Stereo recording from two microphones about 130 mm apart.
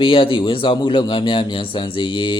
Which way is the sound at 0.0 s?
40° left (ahead or behind).